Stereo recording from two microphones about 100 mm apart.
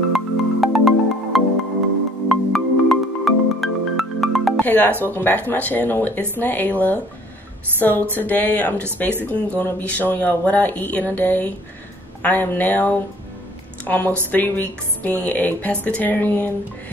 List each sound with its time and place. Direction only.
0.1 s music: centre (ahead or behind)
2.5 s music: centre (ahead or behind)
4.6 s speech: 20° left (ahead or behind)